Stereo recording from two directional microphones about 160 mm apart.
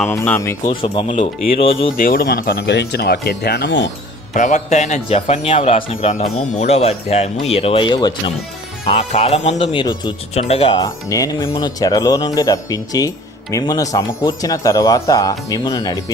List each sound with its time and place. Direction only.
0.1 s speech: 15° left (ahead or behind)
0.7 s speech: 30° left (ahead or behind)
1.0 s a man's voice: 45° left (ahead or behind)
2.0 s speech: 65° left (ahead or behind); by 3.8 s 90° left
4.4 s a man's voice: 50° left (ahead or behind); by 8.1 s 30° left (ahead or behind)
9.0 s speech: 40° left (ahead or behind); by 10.2 s 25° left (ahead or behind)
10.3 s speech: 35° left (ahead or behind)
10.8 s speech: 20° left (ahead or behind)